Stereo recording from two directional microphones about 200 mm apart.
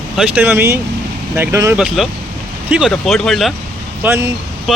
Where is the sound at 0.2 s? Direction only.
10° right (ahead or behind).